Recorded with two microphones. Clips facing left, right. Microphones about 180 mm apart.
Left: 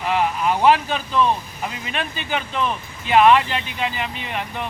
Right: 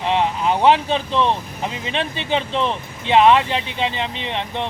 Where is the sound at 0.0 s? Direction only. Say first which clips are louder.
Right 1 dB; 25° right (ahead or behind).